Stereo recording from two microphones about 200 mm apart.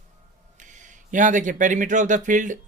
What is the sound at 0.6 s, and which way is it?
Speech, 40° right (ahead or behind).